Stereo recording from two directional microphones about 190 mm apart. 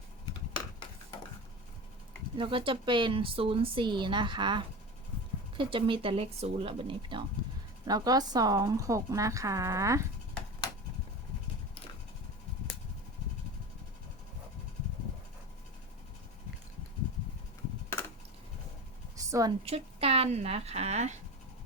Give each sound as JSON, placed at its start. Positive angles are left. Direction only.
{"t": 2.4, "sound": "speech", "side_deg": -25}
{"t": 19.1, "sound": "a sound", "side_deg": -15}
{"t": 19.6, "sound": "speech", "side_deg": -30}